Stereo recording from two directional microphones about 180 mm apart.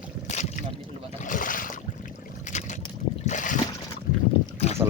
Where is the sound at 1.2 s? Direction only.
50° left (ahead or behind).